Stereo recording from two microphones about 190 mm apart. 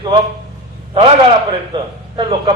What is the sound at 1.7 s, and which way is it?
Speech, 25° right (ahead or behind).